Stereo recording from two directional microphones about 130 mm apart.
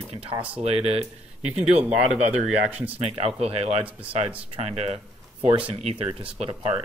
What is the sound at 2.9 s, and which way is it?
Speech, 50° right (ahead or behind).